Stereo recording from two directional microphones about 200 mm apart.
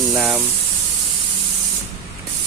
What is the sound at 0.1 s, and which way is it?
Speech, 5° right (ahead or behind).